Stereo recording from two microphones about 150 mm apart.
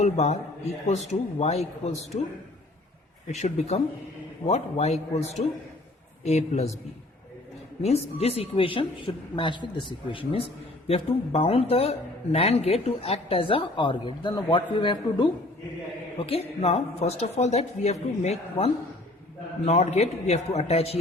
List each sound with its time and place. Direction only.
0.0 s a woman's voice: 50° left (ahead or behind)
3.2 s a woman's voice: 50° left (ahead or behind)
7.8 s a woman's voice: 45° left (ahead or behind)